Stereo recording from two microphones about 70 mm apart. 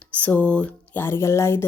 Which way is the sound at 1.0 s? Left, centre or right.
Left.